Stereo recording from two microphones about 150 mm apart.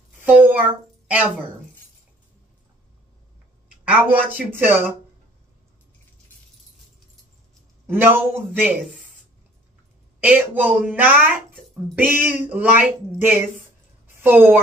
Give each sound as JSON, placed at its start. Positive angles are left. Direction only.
{"t": 0.2, "sound": "a sound", "side_deg": -10}
{"t": 3.8, "sound": "speech", "side_deg": -10}
{"t": 7.8, "sound": "speech", "side_deg": -15}
{"t": 10.2, "sound": "a woman's voice", "side_deg": -10}